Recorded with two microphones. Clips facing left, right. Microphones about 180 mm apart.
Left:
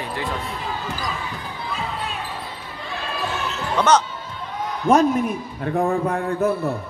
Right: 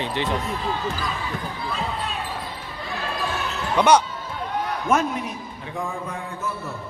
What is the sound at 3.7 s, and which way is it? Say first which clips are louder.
Speech: right 1 dB; 10° right (ahead or behind).